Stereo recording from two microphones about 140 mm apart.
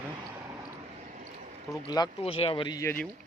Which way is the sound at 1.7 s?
30° left (ahead or behind).